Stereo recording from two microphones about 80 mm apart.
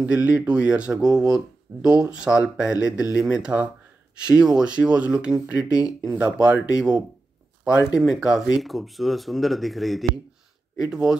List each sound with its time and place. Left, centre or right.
0.0 s speech: centre